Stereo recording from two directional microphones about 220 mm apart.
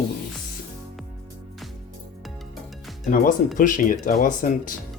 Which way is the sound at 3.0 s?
40° left (ahead or behind).